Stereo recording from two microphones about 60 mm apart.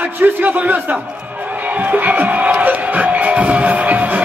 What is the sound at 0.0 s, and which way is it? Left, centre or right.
Speech, right.